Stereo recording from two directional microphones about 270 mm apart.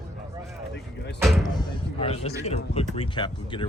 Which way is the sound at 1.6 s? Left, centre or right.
Centre.